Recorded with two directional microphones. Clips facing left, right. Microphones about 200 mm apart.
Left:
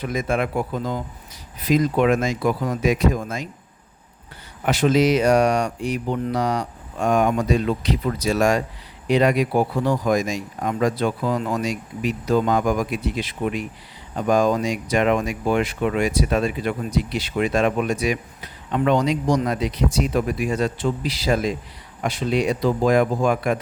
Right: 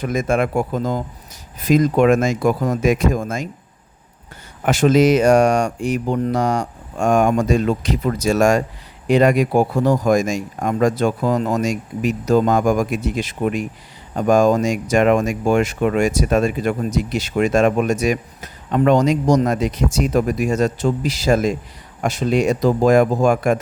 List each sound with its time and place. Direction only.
0.0 s speech: 45° right (ahead or behind)
4.6 s speech: 45° right (ahead or behind)